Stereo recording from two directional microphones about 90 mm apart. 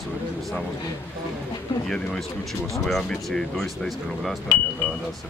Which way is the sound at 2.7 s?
5° left (ahead or behind).